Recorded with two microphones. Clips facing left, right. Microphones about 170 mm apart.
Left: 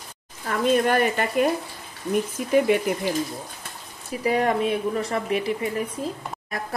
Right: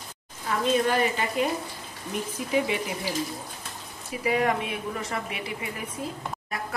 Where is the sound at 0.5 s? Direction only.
55° left (ahead or behind).